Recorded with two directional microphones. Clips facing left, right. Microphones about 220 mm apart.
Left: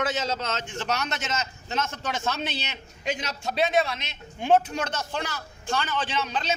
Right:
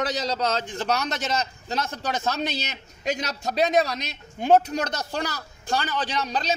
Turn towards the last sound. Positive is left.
turn(degrees=-40)  # may be behind; listen again after turning